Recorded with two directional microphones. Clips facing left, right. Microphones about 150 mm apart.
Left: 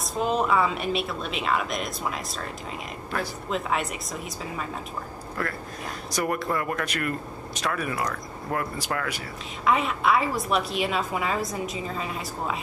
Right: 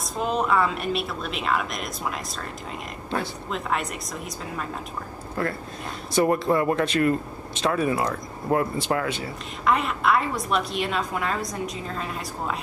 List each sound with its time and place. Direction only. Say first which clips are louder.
0.0 s a woman's voice: even; centre (ahead or behind)
3.4 s a woman's voice: even; centre (ahead or behind)
5.4 s a man's voice: right 4 dB; 25° right (ahead or behind)
9.7 s a woman's voice: right 1 dB; centre (ahead or behind)